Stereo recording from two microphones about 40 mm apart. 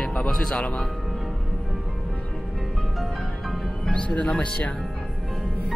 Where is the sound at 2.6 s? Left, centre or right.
Centre.